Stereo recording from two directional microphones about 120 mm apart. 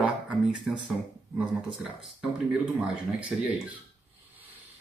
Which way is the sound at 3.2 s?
10° right (ahead or behind).